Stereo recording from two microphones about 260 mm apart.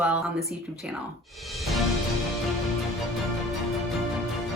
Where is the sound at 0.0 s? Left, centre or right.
Centre.